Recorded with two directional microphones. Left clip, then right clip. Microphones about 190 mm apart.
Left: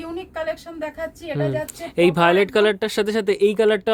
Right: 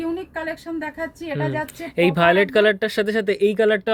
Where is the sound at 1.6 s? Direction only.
15° left (ahead or behind).